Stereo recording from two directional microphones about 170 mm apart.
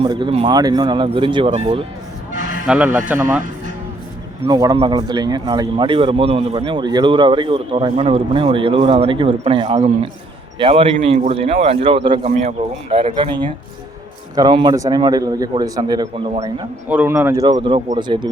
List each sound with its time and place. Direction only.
0.0 s speech: 30° right (ahead or behind)
2.6 s speech: 10° right (ahead or behind)
4.4 s a man's voice: 25° right (ahead or behind)
12.3 s a man's voice: 40° right (ahead or behind)
16.9 s speech: 10° right (ahead or behind); by 18.3 s 25° right (ahead or behind)